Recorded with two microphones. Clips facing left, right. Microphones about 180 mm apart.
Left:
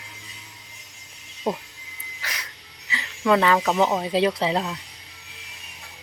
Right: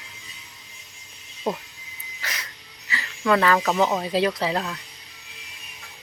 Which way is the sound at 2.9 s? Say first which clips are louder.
Left 1 dB; 20° left (ahead or behind).